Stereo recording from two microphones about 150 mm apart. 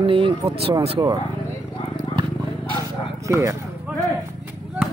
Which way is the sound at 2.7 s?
25° right (ahead or behind).